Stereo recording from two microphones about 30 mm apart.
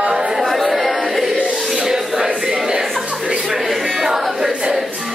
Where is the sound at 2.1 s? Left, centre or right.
Right.